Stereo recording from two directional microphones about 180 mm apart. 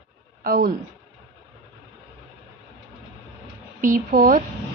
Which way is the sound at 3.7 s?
50° right (ahead or behind).